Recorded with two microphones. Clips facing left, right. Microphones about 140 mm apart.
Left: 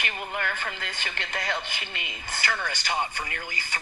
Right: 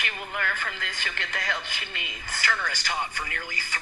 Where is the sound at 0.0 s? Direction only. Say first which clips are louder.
Left 1 dB; 25° left (ahead or behind).